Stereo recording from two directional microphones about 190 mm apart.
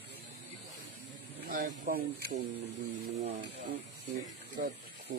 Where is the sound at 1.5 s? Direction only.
55° right (ahead or behind).